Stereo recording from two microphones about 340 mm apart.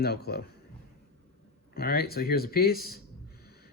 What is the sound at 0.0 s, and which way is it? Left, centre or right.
Speech, left.